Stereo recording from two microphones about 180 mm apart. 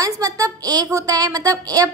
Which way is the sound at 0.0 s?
20° right (ahead or behind).